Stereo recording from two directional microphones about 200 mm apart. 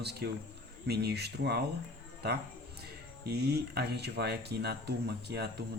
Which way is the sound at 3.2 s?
55° right (ahead or behind).